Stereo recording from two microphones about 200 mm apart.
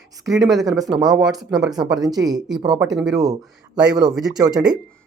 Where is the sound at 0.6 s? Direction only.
20° right (ahead or behind).